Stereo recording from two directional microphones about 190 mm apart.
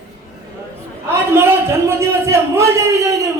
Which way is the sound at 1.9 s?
15° right (ahead or behind).